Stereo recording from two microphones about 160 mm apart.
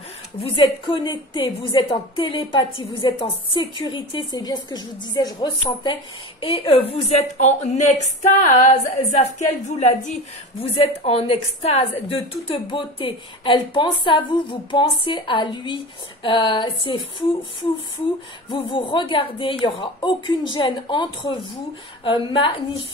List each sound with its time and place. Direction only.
0.9 s a woman's voice: 30° left (ahead or behind); by 10.1 s 45° left (ahead or behind)
10.6 s a woman's voice: 35° left (ahead or behind)
18.5 s a woman's voice: 30° left (ahead or behind)